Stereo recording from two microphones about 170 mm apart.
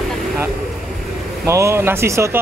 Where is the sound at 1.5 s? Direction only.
15° right (ahead or behind).